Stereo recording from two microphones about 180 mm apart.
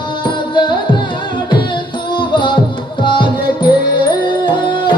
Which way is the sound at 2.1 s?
25° left (ahead or behind).